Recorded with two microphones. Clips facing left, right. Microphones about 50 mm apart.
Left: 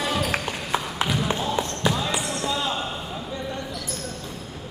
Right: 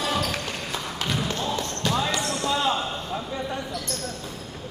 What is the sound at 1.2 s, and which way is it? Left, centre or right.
Basketball bounce, centre.